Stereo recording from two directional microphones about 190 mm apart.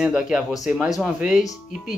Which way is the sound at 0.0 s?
5° right (ahead or behind).